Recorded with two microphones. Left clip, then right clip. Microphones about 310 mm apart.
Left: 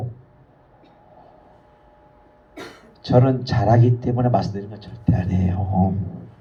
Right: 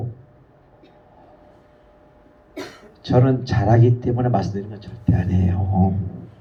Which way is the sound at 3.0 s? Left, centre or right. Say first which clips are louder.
Left 1 dB; left.